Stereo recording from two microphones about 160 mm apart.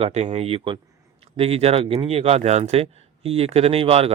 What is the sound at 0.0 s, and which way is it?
Speech, 45° right (ahead or behind).